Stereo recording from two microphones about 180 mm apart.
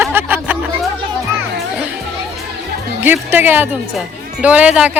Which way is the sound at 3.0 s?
10° right (ahead or behind).